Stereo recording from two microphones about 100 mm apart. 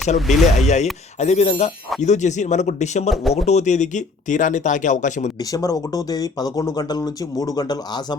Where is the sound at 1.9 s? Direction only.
Centre (ahead or behind).